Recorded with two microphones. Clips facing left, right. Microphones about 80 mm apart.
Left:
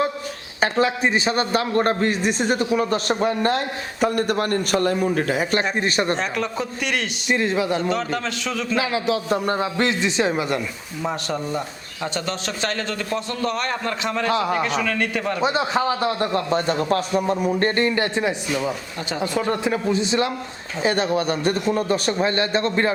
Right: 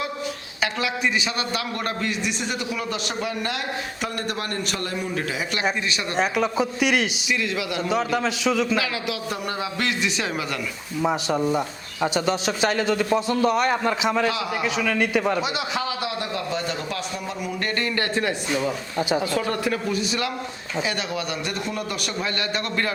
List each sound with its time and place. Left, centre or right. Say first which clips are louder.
0.6 s a man's voice: left 5 dB; left
6.1 s a man's voice: right 3 dB; centre
7.3 s a man's voice: left 5 dB; left
7.8 s a man's voice: even; centre
8.8 s a man's voice: left 5 dB; left
11.0 s a man's voice: right 3 dB; centre
14.3 s a man's voice: left 4 dB; left
14.5 s a man's voice: left 2 dB; centre
15.4 s a man's voice: left 5 dB; left